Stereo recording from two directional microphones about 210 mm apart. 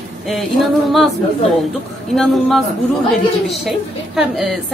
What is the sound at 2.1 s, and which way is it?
Speech, centre (ahead or behind).